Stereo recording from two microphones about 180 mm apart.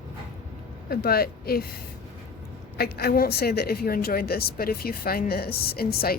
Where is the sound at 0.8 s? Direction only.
60° left (ahead or behind).